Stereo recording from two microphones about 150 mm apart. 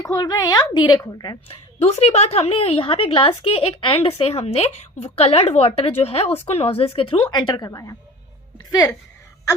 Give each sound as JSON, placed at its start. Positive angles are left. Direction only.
{"t": 0.0, "sound": "a woman's voice", "side_deg": 25}
{"t": 1.8, "sound": "a woman's voice", "side_deg": 45}
{"t": 8.5, "sound": "a sound", "side_deg": 25}